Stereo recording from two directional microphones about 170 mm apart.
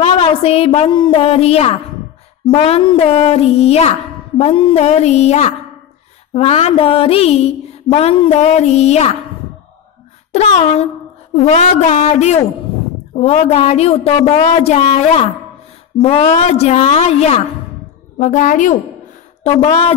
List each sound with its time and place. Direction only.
0.0 s speech: 35° left (ahead or behind)
10.3 s a woman's voice: 40° left (ahead or behind)